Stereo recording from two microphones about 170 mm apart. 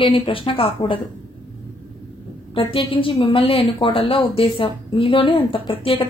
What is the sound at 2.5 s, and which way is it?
A woman's voice, 35° left (ahead or behind).